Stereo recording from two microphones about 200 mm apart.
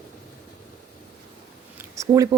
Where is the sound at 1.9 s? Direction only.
15° right (ahead or behind).